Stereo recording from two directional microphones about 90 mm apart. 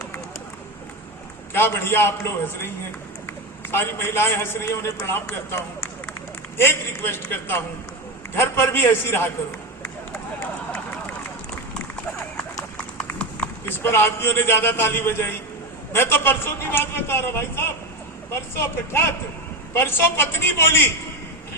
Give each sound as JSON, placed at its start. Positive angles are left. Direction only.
{"t": 1.5, "sound": "a man's voice", "side_deg": 25}
{"t": 3.7, "sound": "a man's voice", "side_deg": 25}
{"t": 13.0, "sound": "clip-clop", "side_deg": 15}
{"t": 13.7, "sound": "a man's voice", "side_deg": 25}